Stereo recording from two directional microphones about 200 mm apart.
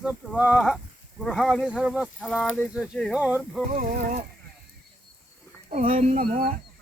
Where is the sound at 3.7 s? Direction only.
40° right (ahead or behind).